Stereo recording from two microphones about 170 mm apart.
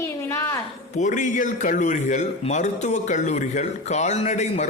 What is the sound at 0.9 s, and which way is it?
A man's voice, 45° left (ahead or behind).